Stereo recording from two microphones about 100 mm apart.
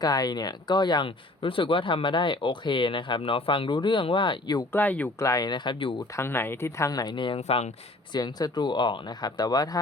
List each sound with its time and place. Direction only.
0.0 s speech: 40° left (ahead or behind)
4.7 s speech: 15° left (ahead or behind)
5.2 s speech: 35° left (ahead or behind)
6.1 s speech: 25° left (ahead or behind); by 7.3 s 50° left (ahead or behind)
7.3 s speech: 90° left
8.1 s speech: 40° left (ahead or behind)